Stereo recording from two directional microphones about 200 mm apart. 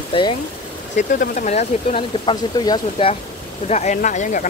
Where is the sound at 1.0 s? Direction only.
40° left (ahead or behind); by 3.1 s 20° left (ahead or behind).